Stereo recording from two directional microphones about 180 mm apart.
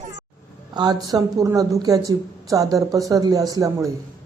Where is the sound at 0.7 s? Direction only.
20° right (ahead or behind).